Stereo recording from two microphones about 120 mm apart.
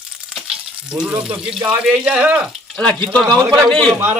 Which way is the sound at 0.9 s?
10° right (ahead or behind).